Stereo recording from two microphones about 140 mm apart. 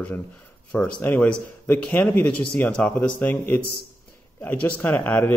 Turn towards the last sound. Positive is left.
turn(degrees=15)  # may be behind; listen again after turning